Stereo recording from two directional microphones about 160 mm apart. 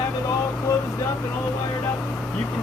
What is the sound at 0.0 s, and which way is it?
Vehicle, 20° left (ahead or behind).